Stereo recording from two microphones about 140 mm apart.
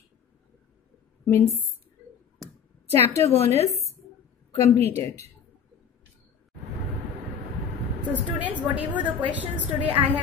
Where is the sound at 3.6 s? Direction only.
50° left (ahead or behind).